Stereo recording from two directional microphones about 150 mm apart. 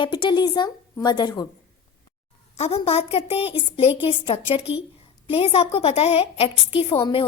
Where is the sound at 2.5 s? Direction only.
45° left (ahead or behind).